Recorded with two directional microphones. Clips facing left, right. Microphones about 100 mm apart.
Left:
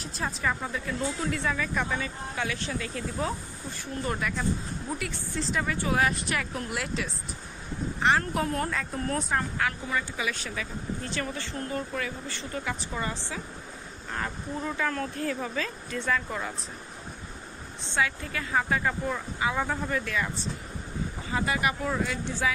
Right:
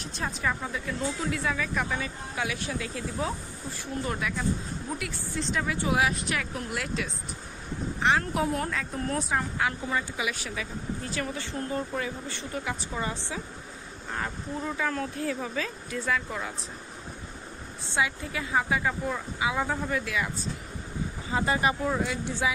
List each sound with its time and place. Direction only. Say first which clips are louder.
0.0 s speech: even; centre (ahead or behind)
5.8 s speech: right 1 dB; 15° right (ahead or behind)
6.0 s speech: even; centre (ahead or behind)
9.6 s speech: right 1 dB; 20° right (ahead or behind)
14.1 s speech: even; 5° right (ahead or behind)
17.9 s speech: even; 15° right (ahead or behind)
21.3 s speech: right 2 dB; 25° right (ahead or behind)
21.9 s speech: right 1 dB; 15° right (ahead or behind)